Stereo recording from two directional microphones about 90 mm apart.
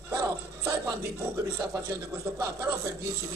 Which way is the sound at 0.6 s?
35° right (ahead or behind).